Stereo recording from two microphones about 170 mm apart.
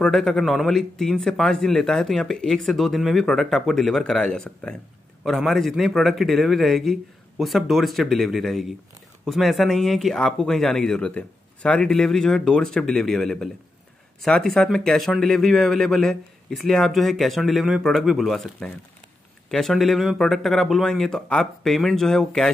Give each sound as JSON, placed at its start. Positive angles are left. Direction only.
{"t": 0.0, "sound": "speech", "side_deg": 0}